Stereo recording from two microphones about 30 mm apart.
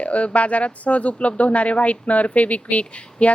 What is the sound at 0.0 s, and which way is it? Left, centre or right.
A woman's voice, left.